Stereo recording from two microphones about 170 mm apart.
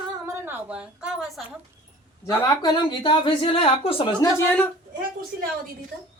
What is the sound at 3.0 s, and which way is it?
Speech, 30° left (ahead or behind).